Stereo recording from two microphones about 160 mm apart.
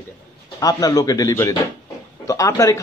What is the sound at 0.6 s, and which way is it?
A man's voice, 20° left (ahead or behind).